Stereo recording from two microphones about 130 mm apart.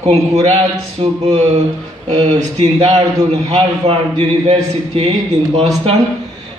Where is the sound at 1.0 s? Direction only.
45° right (ahead or behind).